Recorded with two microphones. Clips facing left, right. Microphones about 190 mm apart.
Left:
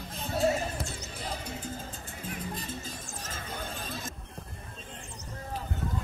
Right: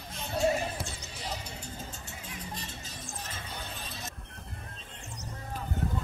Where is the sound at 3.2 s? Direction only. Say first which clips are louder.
Left 3 dB; 45° left (ahead or behind).